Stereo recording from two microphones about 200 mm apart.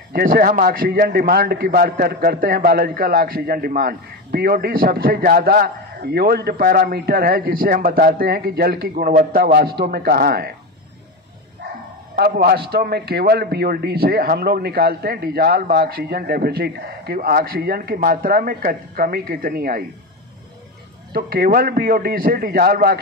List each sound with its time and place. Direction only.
0.1 s speech: 45° right (ahead or behind)
12.2 s speech: 50° right (ahead or behind)
21.1 s speech: 50° right (ahead or behind)